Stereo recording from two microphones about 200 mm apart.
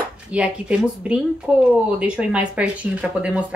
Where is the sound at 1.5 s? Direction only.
5° right (ahead or behind).